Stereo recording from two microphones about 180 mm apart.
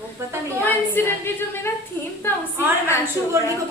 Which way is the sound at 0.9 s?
10° left (ahead or behind).